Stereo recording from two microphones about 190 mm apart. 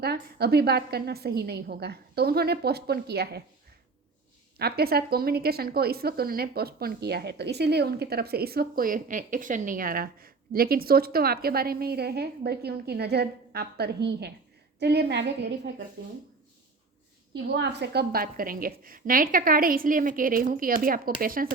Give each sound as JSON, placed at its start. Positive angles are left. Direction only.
{"t": 0.0, "sound": "a woman's voice", "side_deg": -55}
{"t": 4.5, "sound": "a woman's voice", "side_deg": -55}
{"t": 17.3, "sound": "a woman's voice", "side_deg": -65}